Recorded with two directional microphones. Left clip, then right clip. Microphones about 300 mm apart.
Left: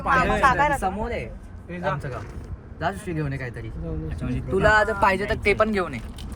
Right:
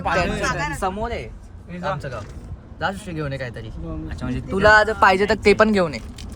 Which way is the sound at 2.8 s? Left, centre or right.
Centre.